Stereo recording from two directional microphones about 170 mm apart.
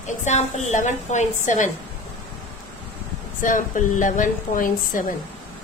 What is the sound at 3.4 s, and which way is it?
A woman's voice, 50° left (ahead or behind).